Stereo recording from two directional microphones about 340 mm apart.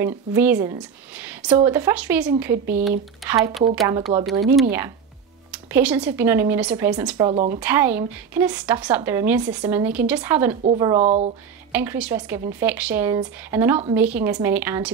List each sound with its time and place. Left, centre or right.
0.0 s a woman's voice: centre
5.5 s speech: centre
7.5 s a woman's voice: centre
10.5 s speech: right
11.7 s a woman's voice: centre